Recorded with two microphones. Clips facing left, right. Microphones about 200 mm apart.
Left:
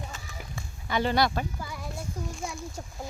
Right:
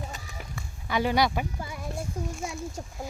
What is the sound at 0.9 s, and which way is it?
A woman's voice, 10° right (ahead or behind).